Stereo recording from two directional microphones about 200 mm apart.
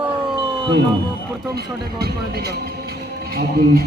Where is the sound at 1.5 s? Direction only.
50° right (ahead or behind).